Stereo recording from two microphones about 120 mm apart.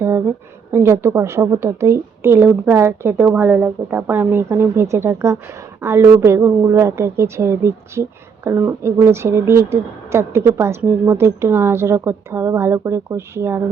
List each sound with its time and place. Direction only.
0.7 s a woman's voice: 20° right (ahead or behind)